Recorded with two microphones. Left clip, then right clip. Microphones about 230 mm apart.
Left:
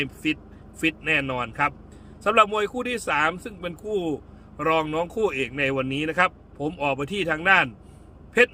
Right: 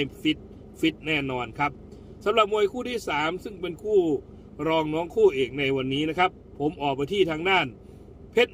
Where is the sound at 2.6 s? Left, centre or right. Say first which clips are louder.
Even; left.